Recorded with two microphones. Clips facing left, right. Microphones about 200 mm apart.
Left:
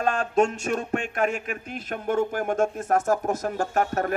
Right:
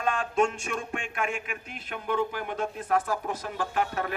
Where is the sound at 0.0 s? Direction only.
40° left (ahead or behind).